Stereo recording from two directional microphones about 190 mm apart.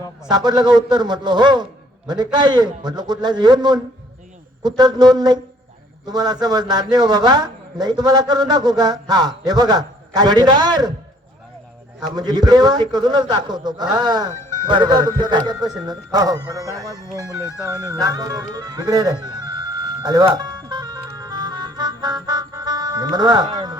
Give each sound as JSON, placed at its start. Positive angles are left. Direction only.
{"t": 0.3, "sound": "a man's voice", "side_deg": -20}
{"t": 11.9, "sound": "a man's voice", "side_deg": -20}